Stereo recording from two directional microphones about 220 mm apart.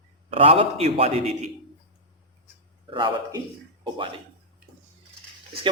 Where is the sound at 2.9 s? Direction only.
20° right (ahead or behind).